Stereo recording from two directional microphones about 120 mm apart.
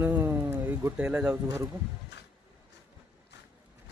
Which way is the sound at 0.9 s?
5° right (ahead or behind).